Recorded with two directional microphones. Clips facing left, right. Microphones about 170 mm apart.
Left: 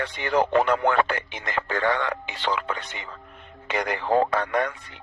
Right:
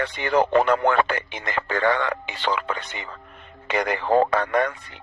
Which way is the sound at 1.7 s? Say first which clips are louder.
Right 3 dB; 90° right.